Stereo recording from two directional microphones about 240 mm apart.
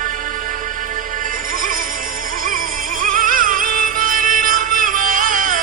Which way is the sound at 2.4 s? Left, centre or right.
Right.